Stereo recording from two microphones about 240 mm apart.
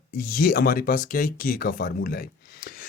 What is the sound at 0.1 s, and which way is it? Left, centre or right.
Speech, left.